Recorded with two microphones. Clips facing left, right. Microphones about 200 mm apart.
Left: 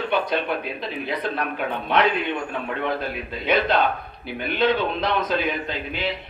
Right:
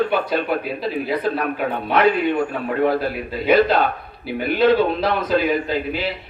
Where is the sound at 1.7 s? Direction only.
45° right (ahead or behind).